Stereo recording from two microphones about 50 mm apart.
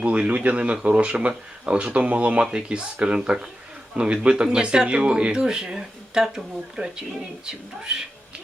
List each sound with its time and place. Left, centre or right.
0.0 s speech: right